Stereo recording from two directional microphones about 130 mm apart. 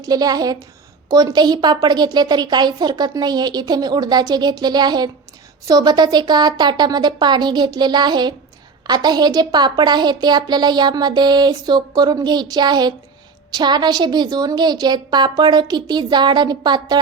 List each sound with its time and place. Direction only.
0.0 s a woman's voice: 30° right (ahead or behind)